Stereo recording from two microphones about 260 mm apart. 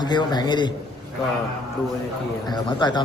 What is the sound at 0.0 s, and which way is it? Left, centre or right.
Speech, centre.